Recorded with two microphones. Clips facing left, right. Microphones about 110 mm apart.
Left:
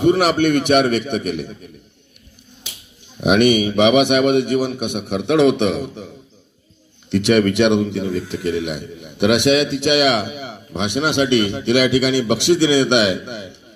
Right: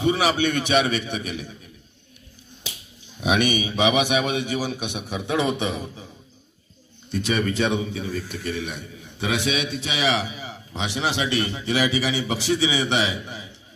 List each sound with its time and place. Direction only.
0.0 s a man's voice: 60° left (ahead or behind)
3.2 s a man's voice: 60° left (ahead or behind); by 6.0 s 75° left (ahead or behind)
7.1 s a man's voice: 85° left